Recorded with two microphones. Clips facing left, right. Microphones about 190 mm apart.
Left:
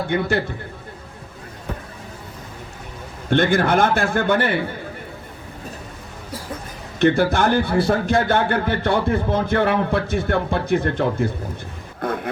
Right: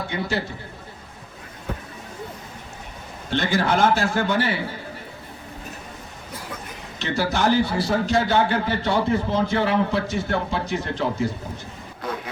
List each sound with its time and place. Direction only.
0.1 s a man's voice: 55° left (ahead or behind)
3.2 s a man's voice: 55° left (ahead or behind)
7.0 s a man's voice: 55° left (ahead or behind)